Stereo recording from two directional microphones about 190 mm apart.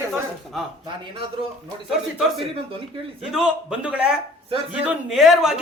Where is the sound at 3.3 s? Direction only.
5° right (ahead or behind).